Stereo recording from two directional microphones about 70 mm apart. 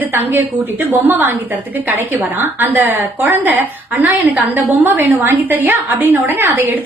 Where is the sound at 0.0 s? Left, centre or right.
Right.